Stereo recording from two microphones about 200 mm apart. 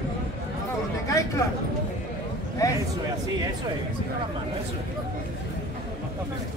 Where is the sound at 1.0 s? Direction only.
15° left (ahead or behind).